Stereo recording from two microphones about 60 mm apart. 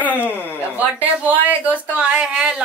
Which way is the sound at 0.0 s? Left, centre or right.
Left.